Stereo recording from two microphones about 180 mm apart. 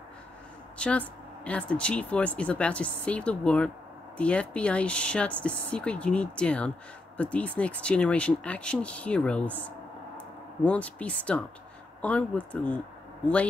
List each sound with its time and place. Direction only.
0.7 s speech: 5° left (ahead or behind)